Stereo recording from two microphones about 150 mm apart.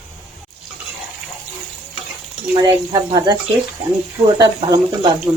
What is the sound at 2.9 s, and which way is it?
Speech, 30° right (ahead or behind).